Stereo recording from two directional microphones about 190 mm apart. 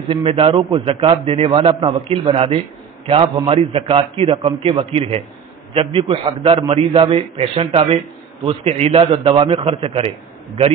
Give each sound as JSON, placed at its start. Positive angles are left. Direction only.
{"t": 0.1, "sound": "a man's voice", "side_deg": -30}